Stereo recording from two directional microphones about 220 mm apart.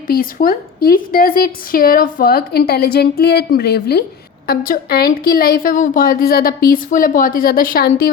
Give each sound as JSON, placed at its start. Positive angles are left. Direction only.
{"t": 0.1, "sound": "a woman's voice", "side_deg": 40}